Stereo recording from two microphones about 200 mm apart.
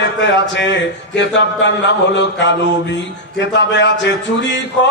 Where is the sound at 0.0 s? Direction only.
65° left (ahead or behind).